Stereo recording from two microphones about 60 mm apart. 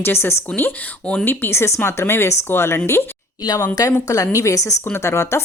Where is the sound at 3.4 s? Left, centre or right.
Left.